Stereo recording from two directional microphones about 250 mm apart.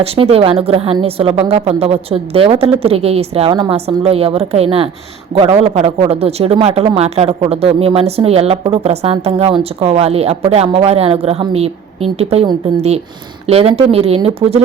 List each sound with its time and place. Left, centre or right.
0.0 s speech: right